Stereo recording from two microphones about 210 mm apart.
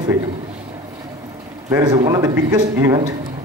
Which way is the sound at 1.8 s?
20° right (ahead or behind).